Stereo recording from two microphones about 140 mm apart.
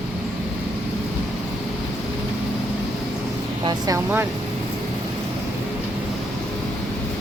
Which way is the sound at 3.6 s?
30° right (ahead or behind).